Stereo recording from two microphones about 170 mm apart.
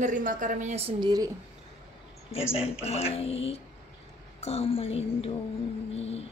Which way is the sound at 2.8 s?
35° left (ahead or behind).